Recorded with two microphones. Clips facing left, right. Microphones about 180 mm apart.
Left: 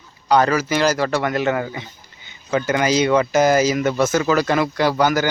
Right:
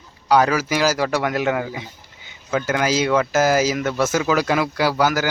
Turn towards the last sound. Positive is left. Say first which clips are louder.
# left 2 dB
turn(degrees=-5)  # may be behind; listen again after turning